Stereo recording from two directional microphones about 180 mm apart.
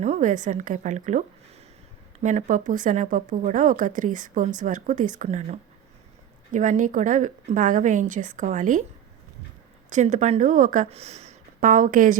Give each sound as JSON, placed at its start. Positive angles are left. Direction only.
{"t": 0.0, "sound": "speech", "side_deg": -40}
{"t": 2.2, "sound": "speech", "side_deg": -45}
{"t": 9.9, "sound": "speech", "side_deg": -40}